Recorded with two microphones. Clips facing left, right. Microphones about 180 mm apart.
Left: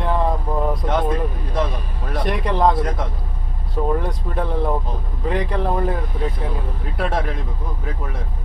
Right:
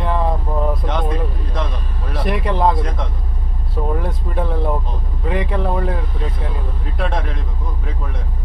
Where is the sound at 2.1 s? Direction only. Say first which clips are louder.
Right 1 dB; centre (ahead or behind).